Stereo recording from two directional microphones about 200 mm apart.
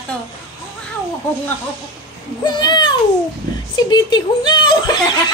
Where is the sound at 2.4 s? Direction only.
20° left (ahead or behind).